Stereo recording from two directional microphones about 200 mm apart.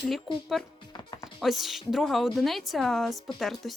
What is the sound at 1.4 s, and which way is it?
A woman's voice, centre (ahead or behind).